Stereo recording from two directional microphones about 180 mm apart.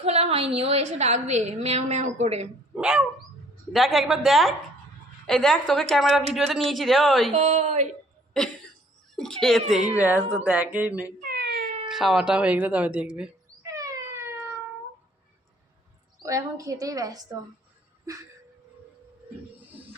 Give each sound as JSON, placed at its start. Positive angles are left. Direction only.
{"t": 0.0, "sound": "a woman's voice", "side_deg": -35}
{"t": 2.7, "sound": "dog", "side_deg": -5}
{"t": 3.7, "sound": "speech", "side_deg": 0}
{"t": 7.3, "sound": "a woman's voice", "side_deg": -40}
{"t": 9.1, "sound": "speech", "side_deg": 0}
{"t": 11.2, "sound": "wail", "side_deg": -60}
{"t": 11.9, "sound": "speech", "side_deg": 0}
{"t": 13.6, "sound": "wail", "side_deg": -20}
{"t": 16.2, "sound": "a woman's voice", "side_deg": -20}